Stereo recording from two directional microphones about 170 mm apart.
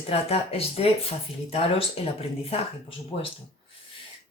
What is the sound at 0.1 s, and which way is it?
Speech, 35° left (ahead or behind).